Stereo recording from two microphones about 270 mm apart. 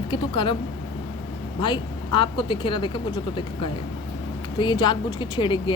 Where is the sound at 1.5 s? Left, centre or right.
Centre.